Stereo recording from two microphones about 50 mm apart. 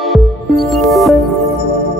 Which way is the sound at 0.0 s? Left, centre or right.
Centre.